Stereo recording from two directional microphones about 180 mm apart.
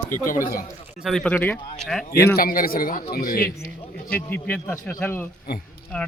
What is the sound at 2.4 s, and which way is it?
A man's voice, 55° left (ahead or behind).